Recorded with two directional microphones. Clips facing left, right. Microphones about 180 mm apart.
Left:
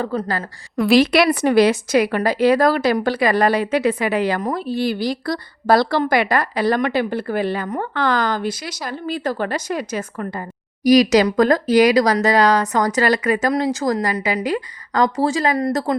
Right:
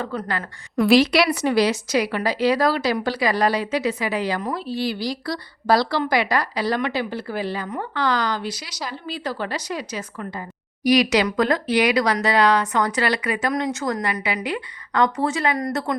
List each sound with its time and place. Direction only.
0.1 s speech: 40° left (ahead or behind)
0.9 s a woman's voice: 55° left (ahead or behind)
10.8 s speech: 40° left (ahead or behind)
13.5 s speech: 35° left (ahead or behind)